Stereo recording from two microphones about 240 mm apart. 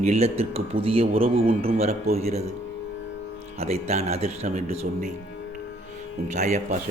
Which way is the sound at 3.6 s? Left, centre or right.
Right.